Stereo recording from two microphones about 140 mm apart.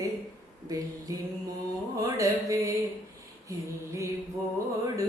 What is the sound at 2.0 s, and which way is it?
Music, 25° right (ahead or behind).